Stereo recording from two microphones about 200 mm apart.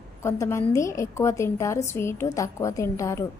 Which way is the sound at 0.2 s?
15° left (ahead or behind).